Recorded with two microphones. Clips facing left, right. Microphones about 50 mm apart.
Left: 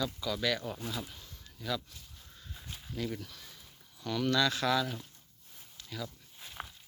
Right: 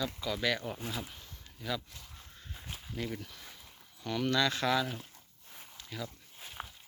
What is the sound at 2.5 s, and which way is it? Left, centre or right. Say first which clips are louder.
Walk: even; centre.